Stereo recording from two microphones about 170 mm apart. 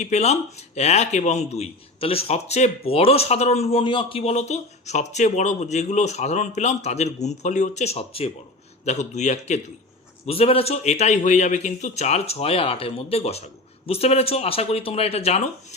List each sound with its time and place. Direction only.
0.0 s a man's voice: 40° left (ahead or behind)